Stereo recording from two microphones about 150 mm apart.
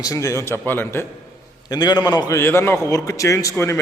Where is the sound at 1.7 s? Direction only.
25° left (ahead or behind).